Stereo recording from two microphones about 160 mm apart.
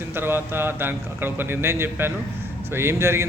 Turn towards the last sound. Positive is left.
turn(degrees=-15)  # may be behind; listen again after turning